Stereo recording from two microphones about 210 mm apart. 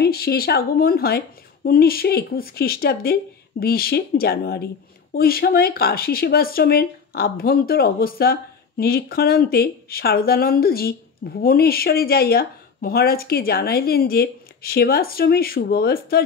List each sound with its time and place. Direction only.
0.0 s speech: 50° left (ahead or behind)